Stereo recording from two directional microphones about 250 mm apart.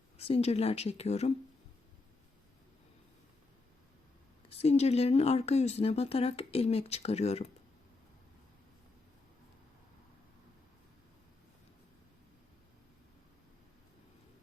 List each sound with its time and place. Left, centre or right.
0.2 s speech: left
4.4 s speech: left